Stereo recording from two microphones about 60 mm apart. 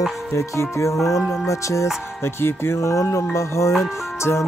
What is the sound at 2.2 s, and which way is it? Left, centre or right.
Music, left.